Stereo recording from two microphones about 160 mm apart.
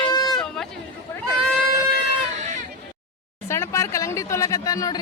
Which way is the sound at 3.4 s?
15° left (ahead or behind).